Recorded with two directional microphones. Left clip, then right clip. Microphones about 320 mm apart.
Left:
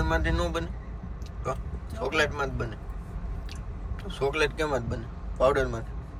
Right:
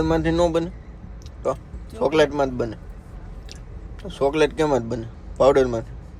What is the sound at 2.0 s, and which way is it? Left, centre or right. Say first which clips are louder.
Speech: right 8 dB; centre.